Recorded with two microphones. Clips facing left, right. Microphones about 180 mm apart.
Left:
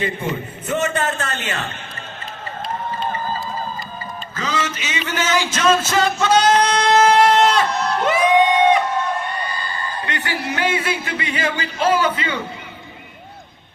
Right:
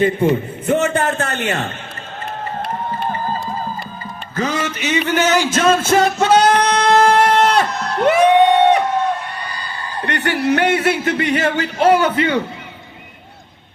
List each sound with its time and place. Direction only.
0.3 s music: 55° right (ahead or behind)
4.4 s music: 60° right (ahead or behind)
8.1 s crowd: 65° right (ahead or behind)
10.0 s speech: 65° right (ahead or behind)